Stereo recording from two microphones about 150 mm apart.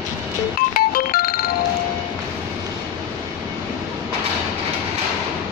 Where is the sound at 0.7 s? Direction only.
85° left.